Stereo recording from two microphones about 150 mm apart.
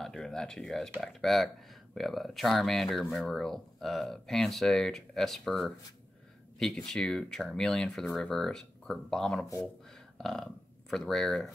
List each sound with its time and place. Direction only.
0.0 s speech: 5° left (ahead or behind)